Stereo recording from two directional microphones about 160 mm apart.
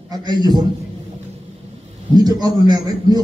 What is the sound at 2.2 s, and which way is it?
A man's voice, 25° right (ahead or behind).